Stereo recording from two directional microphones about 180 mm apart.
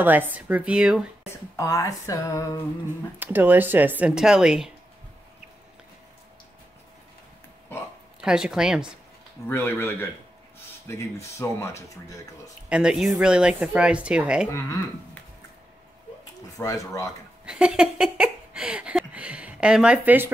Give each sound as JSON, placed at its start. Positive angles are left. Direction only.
{"t": 0.0, "sound": "speech", "side_deg": -10}
{"t": 1.6, "sound": "speech", "side_deg": 15}
{"t": 3.2, "sound": "speech", "side_deg": -10}
{"t": 8.2, "sound": "speech", "side_deg": -5}
{"t": 9.5, "sound": "speech", "side_deg": 15}
{"t": 11.3, "sound": "speech", "side_deg": 15}
{"t": 12.6, "sound": "speech", "side_deg": -5}
{"t": 16.5, "sound": "speech", "side_deg": 20}
{"t": 17.5, "sound": "a sound", "side_deg": -5}